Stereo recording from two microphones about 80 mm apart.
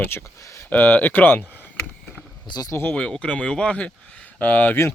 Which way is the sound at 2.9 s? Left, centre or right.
Centre.